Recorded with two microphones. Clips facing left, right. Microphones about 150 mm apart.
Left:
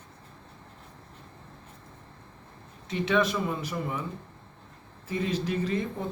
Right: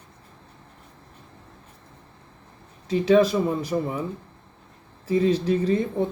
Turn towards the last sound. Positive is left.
turn(degrees=-35)  # may be behind; listen again after turning